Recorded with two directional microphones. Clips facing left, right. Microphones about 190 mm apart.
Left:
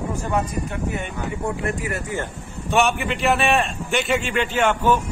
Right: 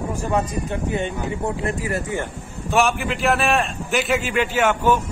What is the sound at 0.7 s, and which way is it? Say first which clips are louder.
Speech: right 3 dB; 25° right (ahead or behind).